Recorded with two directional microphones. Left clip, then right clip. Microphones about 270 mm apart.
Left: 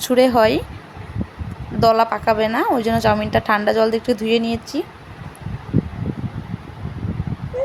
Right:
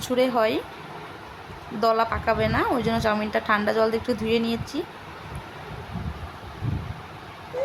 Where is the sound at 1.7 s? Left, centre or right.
Centre.